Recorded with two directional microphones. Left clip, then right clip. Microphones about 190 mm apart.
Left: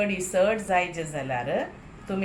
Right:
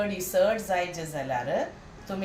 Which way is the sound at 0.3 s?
20° left (ahead or behind).